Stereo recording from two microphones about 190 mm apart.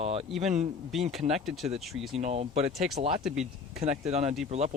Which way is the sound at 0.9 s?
Centre (ahead or behind).